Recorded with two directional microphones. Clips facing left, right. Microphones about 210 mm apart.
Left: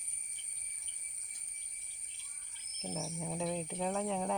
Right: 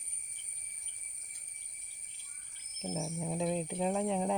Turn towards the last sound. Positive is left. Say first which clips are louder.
# right 3 dB
turn(degrees=-15)  # may be behind; listen again after turning